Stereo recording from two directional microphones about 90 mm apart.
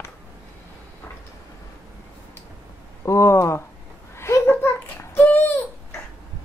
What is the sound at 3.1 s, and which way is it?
Speech, 30° left (ahead or behind).